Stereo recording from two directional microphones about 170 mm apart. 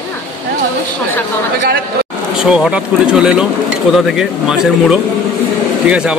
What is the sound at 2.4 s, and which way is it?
Speech, 5° right (ahead or behind).